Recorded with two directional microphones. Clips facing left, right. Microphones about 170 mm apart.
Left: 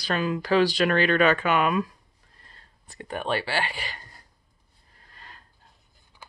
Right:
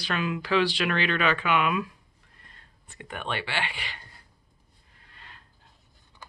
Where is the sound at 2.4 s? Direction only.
35° left (ahead or behind).